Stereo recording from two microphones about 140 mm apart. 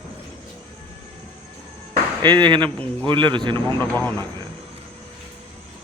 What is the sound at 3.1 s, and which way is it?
Speech, 35° right (ahead or behind).